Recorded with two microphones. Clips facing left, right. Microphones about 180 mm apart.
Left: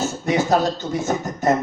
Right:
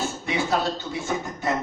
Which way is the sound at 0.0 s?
40° left (ahead or behind).